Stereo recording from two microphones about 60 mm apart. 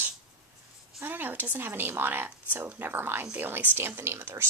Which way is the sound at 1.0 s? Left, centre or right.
Right.